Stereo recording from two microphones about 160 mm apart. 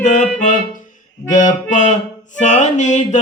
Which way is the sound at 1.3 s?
50° left (ahead or behind).